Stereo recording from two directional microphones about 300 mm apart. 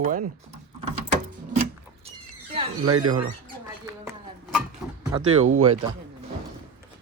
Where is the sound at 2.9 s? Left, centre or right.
Right.